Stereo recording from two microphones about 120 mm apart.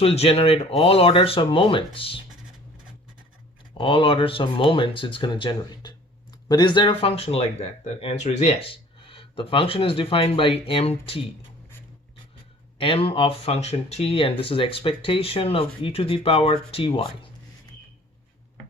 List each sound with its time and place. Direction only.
0.0 s speech: 60° left (ahead or behind)
3.8 s speech: 45° left (ahead or behind)
8.0 s speech: 75° left (ahead or behind)
8.6 s speech: 50° left (ahead or behind)
12.8 s speech: 50° left (ahead or behind)